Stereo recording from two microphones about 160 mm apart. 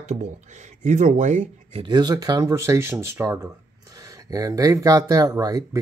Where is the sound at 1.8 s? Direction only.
25° right (ahead or behind).